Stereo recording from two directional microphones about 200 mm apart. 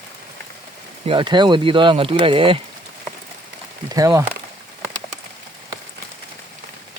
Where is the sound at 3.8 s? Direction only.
20° right (ahead or behind).